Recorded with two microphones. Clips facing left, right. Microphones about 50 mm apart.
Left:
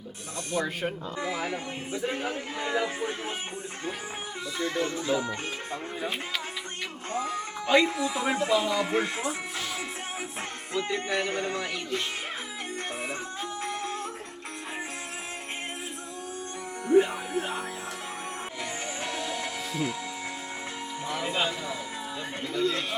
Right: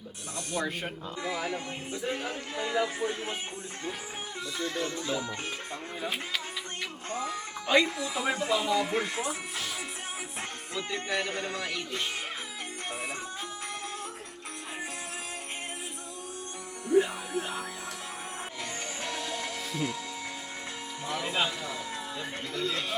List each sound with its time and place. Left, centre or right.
0.5 s a man's voice: centre
4.5 s music: centre
7.1 s speech: centre
7.9 s music: centre
10.8 s music: centre
17.0 s speech: centre
19.0 s music: centre
21.1 s music: centre